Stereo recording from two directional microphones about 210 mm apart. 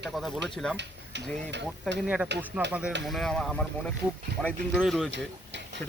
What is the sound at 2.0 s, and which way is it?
Speech, 5° right (ahead or behind).